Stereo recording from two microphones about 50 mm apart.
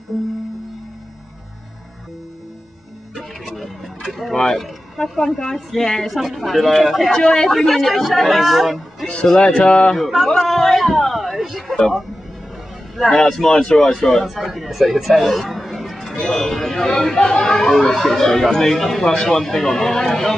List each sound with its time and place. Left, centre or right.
3.2 s a sound: centre
4.4 s speech: centre
7.2 s speech: centre
9.0 s speech: left
9.9 s speech: centre
11.7 s speech: centre
13.1 s speech: centre
14.2 s speech: centre
16.2 s speech: centre